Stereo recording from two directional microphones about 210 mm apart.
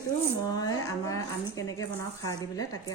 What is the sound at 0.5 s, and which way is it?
A woman's voice, 15° left (ahead or behind).